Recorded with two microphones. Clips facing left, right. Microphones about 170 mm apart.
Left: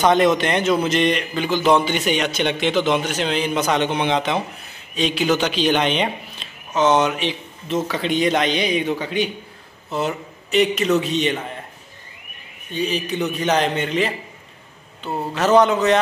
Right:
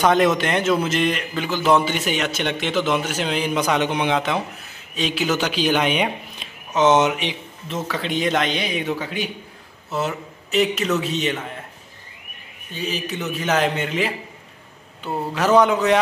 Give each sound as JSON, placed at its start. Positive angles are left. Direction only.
{"t": 0.0, "sound": "a man's voice", "side_deg": -5}
{"t": 6.7, "sound": "speech", "side_deg": -20}
{"t": 7.6, "sound": "a man's voice", "side_deg": 0}
{"t": 12.7, "sound": "a man's voice", "side_deg": -5}
{"t": 15.3, "sound": "a man's voice", "side_deg": -10}